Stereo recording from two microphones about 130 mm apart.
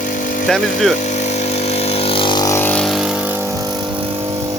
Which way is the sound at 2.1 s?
40° left (ahead or behind).